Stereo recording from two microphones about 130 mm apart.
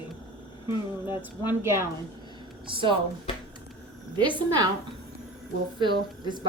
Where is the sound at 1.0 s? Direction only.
20° right (ahead or behind).